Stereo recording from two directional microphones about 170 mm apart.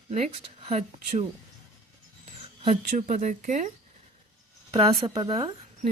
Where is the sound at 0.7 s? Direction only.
40° right (ahead or behind).